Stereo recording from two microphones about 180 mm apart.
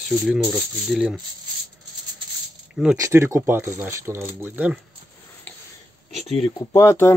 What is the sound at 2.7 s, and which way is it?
Speech, 5° right (ahead or behind).